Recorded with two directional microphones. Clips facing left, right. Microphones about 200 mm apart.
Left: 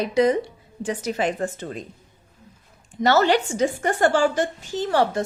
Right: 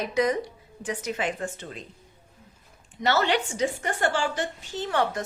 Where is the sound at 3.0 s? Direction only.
45° left (ahead or behind).